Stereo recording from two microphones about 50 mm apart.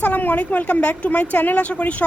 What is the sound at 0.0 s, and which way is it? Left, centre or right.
A woman's voice, left.